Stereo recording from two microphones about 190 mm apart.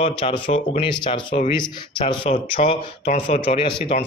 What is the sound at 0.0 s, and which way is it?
A man's voice, 30° left (ahead or behind).